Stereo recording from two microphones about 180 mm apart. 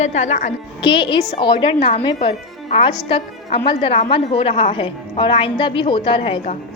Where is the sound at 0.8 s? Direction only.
25° left (ahead or behind).